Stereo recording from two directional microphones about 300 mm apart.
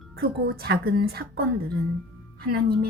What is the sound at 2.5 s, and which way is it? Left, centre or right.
Speech, right.